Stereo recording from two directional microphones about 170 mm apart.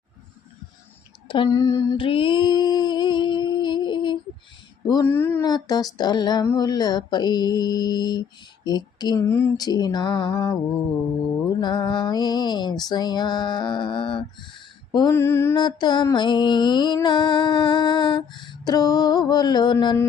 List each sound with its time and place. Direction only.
1.3 s a sound: 25° left (ahead or behind)
5.0 s mantra: 15° left (ahead or behind)
5.4 s music: 25° left (ahead or behind)
11.6 s music: 25° left (ahead or behind)
14.9 s mantra: 20° left (ahead or behind)
15.5 s music: 25° left (ahead or behind)